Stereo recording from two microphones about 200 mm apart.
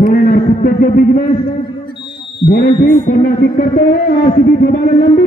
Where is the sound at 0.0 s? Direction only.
50° left (ahead or behind).